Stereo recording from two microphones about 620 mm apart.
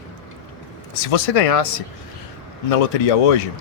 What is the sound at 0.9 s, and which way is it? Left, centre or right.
Speech, left.